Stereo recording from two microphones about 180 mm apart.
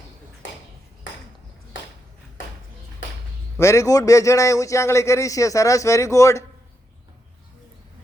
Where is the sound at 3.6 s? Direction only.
15° left (ahead or behind).